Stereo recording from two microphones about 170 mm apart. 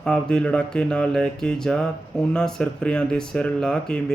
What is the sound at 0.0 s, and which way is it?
A man's voice, 5° left (ahead or behind).